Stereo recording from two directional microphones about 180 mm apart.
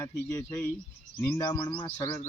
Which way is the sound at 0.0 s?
20° left (ahead or behind).